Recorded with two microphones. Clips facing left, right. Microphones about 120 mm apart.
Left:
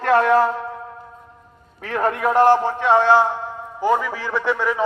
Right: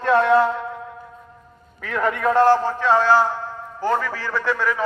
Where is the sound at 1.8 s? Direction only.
40° left (ahead or behind).